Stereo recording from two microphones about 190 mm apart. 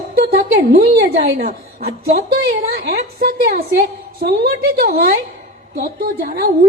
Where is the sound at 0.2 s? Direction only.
50° right (ahead or behind).